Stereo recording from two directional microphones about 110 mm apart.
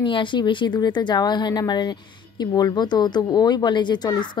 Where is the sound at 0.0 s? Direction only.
45° left (ahead or behind).